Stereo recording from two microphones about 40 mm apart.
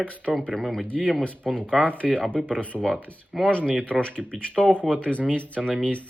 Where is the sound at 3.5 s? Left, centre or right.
Left.